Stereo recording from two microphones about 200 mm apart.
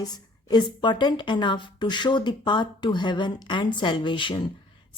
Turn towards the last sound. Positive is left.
turn(degrees=25)  # may be behind; listen again after turning